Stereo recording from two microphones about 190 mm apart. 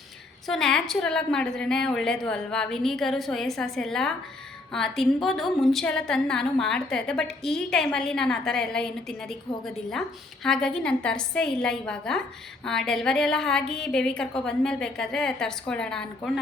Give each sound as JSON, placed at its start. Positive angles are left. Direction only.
{"t": 0.4, "sound": "a woman's voice", "side_deg": 5}